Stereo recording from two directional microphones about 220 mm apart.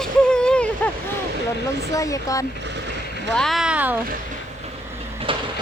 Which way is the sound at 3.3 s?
Centre (ahead or behind).